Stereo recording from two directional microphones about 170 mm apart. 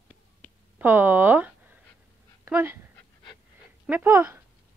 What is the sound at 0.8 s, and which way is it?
Speech, 10° right (ahead or behind).